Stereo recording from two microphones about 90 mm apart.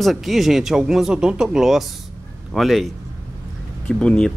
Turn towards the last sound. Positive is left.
turn(degrees=10)  # may be behind; listen again after turning